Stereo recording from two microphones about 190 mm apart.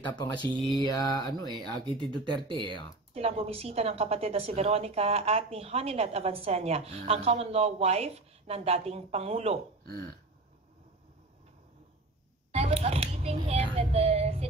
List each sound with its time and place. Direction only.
0.0 s speech: 20° left (ahead or behind)
0.8 s mantra: 20° left (ahead or behind)
1.5 s speech: 25° right (ahead or behind)
12.5 s a sound: 30° right (ahead or behind)
13.7 s speech: 35° right (ahead or behind)